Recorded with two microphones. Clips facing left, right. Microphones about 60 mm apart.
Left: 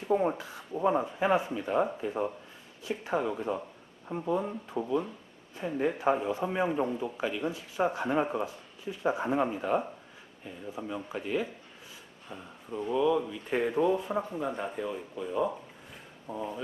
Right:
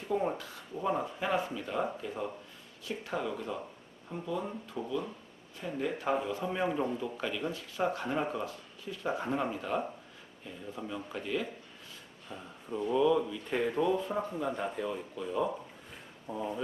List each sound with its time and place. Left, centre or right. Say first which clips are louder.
0.2 s speech: left 3 dB; left
12.3 s speech: even; centre